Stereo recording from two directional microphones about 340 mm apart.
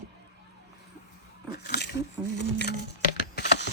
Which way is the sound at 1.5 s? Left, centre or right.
Left.